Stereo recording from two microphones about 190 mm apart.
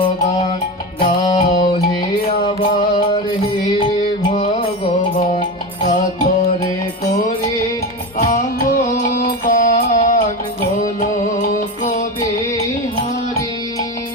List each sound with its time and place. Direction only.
0.9 s music: 25° left (ahead or behind)
8.3 s music: 45° left (ahead or behind)